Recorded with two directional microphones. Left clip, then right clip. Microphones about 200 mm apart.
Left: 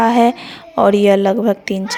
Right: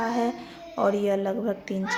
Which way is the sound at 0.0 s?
40° left (ahead or behind).